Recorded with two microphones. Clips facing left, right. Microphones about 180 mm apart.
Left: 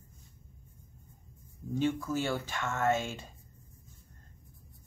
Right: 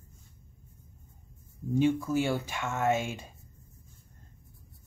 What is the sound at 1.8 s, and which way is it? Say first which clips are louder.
Speech: right 4 dB; 15° right (ahead or behind).